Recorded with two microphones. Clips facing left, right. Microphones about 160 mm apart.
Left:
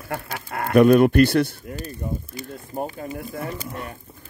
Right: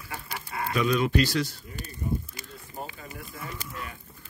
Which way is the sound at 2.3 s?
50° left (ahead or behind).